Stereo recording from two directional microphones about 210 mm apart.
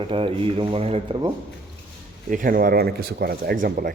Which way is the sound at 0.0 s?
25° right (ahead or behind).